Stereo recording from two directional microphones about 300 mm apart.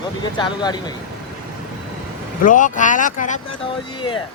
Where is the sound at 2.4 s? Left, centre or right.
Left.